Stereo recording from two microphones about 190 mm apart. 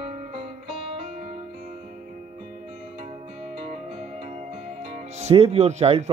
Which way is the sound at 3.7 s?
40° right (ahead or behind).